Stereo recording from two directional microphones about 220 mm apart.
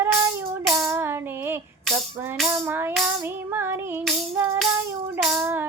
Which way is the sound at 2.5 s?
10° right (ahead or behind).